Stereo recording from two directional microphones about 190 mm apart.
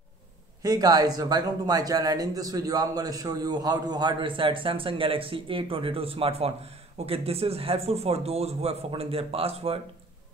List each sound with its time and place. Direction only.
0.6 s a man's voice: 20° right (ahead or behind)